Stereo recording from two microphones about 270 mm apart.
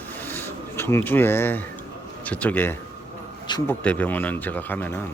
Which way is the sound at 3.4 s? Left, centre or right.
Centre.